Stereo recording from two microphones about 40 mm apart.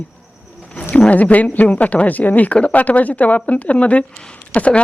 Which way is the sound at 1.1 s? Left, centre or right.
Left.